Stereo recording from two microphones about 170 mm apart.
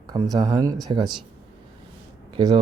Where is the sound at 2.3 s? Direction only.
25° right (ahead or behind).